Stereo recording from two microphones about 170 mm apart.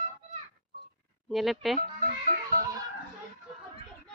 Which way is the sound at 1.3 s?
Centre (ahead or behind).